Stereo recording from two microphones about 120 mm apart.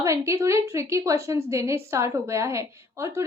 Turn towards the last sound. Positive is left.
turn(degrees=-25)  # may be behind; listen again after turning